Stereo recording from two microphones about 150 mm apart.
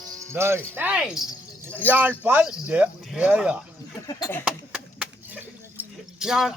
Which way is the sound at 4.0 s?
25° left (ahead or behind).